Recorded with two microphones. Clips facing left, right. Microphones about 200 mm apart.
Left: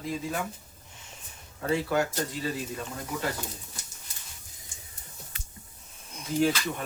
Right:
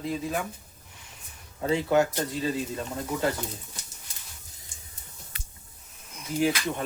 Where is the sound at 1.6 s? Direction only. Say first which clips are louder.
Right 3 dB; 20° right (ahead or behind).